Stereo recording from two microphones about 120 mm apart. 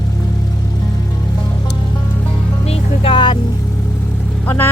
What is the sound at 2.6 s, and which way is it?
Vehicle, 55° left (ahead or behind).